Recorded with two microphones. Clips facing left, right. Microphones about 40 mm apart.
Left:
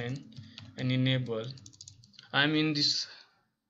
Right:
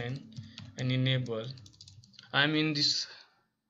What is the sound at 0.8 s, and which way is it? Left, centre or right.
Speech, centre.